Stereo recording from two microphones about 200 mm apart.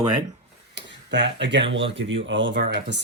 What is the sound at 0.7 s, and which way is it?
Speech, 60° right (ahead or behind).